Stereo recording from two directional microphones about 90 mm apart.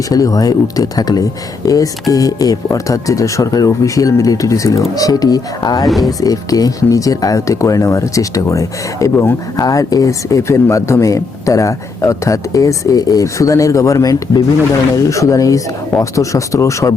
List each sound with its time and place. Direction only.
0.1 s speech: 40° left (ahead or behind)